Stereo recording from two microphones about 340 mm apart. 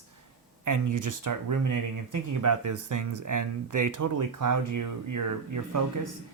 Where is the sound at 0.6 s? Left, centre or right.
Right.